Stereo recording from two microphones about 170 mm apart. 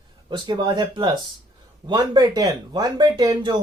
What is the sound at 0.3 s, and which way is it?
Speech, 25° right (ahead or behind).